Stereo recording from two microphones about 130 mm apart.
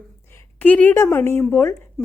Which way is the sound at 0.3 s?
10° left (ahead or behind).